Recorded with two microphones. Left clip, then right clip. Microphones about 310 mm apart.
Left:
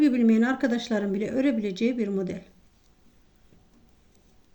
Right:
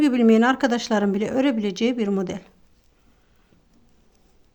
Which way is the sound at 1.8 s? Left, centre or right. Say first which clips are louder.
Right 5 dB; right.